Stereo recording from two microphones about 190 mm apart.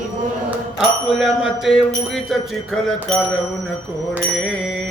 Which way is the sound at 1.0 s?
Centre (ahead or behind).